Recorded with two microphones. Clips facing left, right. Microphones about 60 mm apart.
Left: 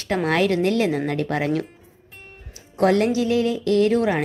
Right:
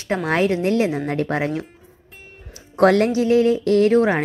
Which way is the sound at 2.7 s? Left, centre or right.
Right.